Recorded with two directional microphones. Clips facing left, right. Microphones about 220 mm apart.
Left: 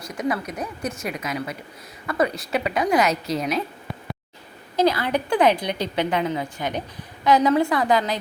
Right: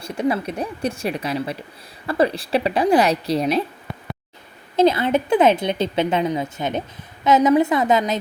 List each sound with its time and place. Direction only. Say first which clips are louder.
0.0 s a woman's voice: right 4 dB; 30° right (ahead or behind)
4.8 s a woman's voice: right 4 dB; 25° right (ahead or behind)